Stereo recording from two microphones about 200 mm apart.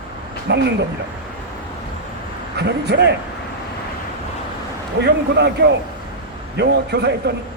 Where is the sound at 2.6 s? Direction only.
55° right (ahead or behind).